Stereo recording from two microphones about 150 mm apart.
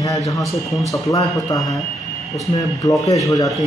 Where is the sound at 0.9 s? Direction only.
25° left (ahead or behind).